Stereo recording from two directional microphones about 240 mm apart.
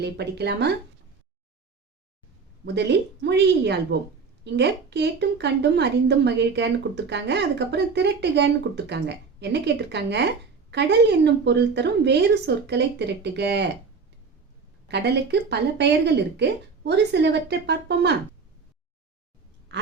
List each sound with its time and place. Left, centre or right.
0.0 s a woman's voice: right
2.6 s a woman's voice: right
14.8 s a woman's voice: right